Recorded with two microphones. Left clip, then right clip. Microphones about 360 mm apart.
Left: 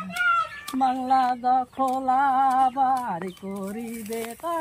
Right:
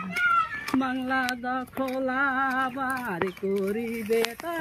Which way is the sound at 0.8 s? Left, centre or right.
Left.